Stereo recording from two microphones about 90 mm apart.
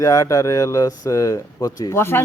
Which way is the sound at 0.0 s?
40° left (ahead or behind).